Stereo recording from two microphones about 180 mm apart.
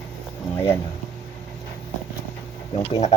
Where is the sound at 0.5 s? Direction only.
15° left (ahead or behind).